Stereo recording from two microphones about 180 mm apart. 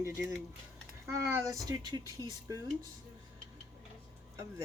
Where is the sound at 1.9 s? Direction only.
20° left (ahead or behind).